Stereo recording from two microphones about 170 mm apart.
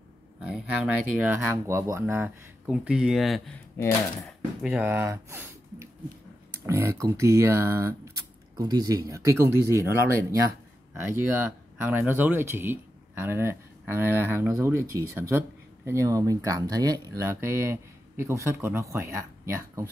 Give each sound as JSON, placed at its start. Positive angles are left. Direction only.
{"t": 0.4, "sound": "a sound", "side_deg": -5}
{"t": 1.2, "sound": "speech", "side_deg": -10}
{"t": 3.7, "sound": "speech", "side_deg": 15}
{"t": 4.6, "sound": "speech", "side_deg": -10}